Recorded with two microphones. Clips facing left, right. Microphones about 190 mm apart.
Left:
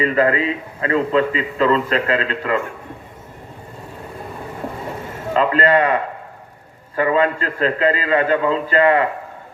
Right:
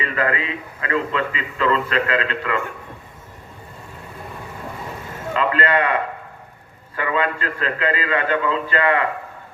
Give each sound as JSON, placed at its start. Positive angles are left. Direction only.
{"t": 0.0, "sound": "a man's voice", "side_deg": 35}
{"t": 5.3, "sound": "a man's voice", "side_deg": 35}